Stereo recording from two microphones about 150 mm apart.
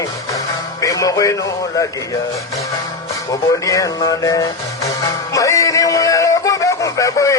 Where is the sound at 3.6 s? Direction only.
25° left (ahead or behind).